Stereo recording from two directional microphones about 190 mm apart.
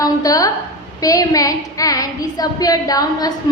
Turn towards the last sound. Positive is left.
turn(degrees=20)  # may be behind; listen again after turning